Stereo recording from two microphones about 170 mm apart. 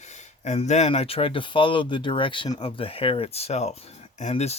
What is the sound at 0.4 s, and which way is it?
Speech, 40° left (ahead or behind).